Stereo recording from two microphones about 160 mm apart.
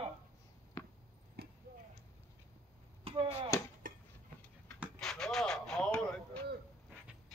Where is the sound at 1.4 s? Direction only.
80° right.